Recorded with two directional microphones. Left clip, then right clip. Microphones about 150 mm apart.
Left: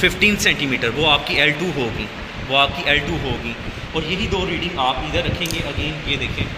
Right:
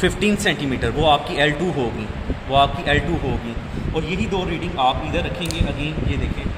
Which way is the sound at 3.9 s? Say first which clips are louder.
Left 2 dB; 80° right.